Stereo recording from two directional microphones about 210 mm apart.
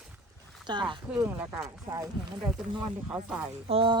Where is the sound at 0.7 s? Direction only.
20° right (ahead or behind).